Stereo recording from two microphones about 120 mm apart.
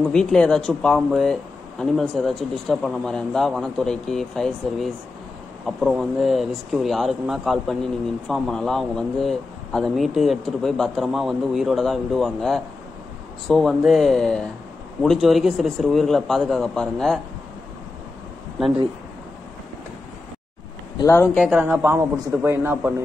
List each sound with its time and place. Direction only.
0.1 s speech: 5° left (ahead or behind)
21.0 s speech: 20° left (ahead or behind)
21.5 s a woman's voice: 15° right (ahead or behind)